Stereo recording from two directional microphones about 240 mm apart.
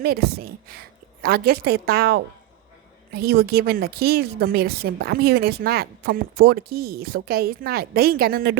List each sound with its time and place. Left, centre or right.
0.0 s a woman's voice: right